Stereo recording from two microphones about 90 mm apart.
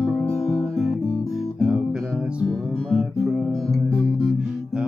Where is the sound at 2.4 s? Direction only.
10° left (ahead or behind).